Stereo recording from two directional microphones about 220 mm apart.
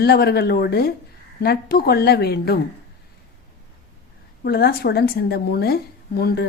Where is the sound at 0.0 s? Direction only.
45° left (ahead or behind).